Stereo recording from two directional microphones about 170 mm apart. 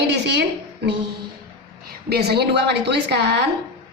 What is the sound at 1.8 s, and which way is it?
A woman's voice, 70° right (ahead or behind).